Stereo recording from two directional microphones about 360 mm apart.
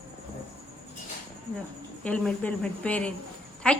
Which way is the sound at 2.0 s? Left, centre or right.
Centre.